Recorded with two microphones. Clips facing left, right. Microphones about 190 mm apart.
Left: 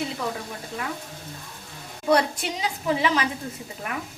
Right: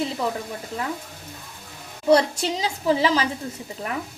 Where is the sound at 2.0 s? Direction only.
30° right (ahead or behind).